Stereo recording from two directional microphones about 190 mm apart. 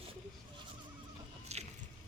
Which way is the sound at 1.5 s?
35° right (ahead or behind).